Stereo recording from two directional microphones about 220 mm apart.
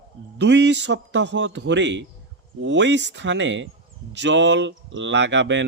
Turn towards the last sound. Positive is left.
turn(degrees=-55)  # may be behind; listen again after turning